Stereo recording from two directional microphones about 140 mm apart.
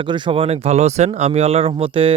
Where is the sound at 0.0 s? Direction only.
40° right (ahead or behind).